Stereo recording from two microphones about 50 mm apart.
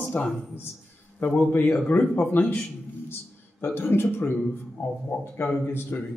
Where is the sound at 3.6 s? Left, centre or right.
Left.